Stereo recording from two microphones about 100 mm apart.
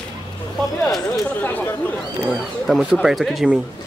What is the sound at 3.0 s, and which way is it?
Speech, centre (ahead or behind).